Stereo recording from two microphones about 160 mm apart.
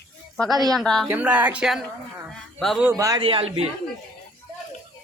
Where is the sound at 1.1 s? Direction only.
10° right (ahead or behind).